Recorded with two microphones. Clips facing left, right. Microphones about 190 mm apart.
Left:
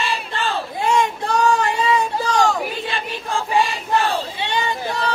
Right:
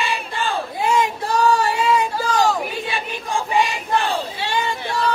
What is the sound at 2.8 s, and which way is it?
Choir, 15° right (ahead or behind).